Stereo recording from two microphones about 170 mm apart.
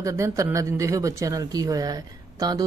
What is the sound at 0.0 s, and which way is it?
Speech, 15° right (ahead or behind).